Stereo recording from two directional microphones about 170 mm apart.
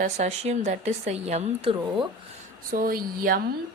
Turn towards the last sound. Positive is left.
turn(degrees=-55)  # may be behind; listen again after turning